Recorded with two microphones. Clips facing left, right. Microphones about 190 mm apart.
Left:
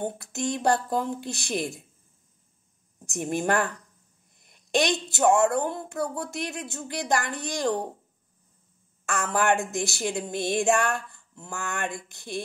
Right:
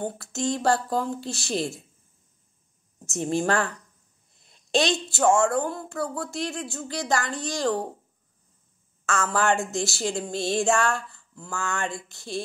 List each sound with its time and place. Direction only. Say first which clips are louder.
0.0 s speech: right 1 dB; 20° left (ahead or behind)
3.1 s speech: right 1 dB; 15° left (ahead or behind)
9.0 s speech: right 1 dB; 15° left (ahead or behind)